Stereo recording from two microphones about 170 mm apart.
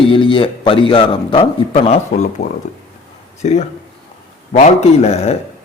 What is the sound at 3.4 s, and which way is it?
A man's voice, 40° left (ahead or behind).